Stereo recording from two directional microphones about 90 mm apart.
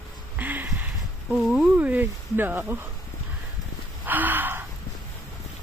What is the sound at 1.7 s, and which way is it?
Speech, 20° right (ahead or behind).